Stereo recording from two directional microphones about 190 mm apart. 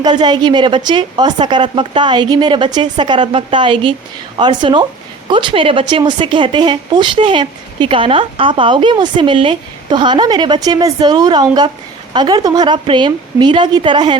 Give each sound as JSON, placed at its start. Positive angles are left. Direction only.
{"t": 0.0, "sound": "speech", "side_deg": -20}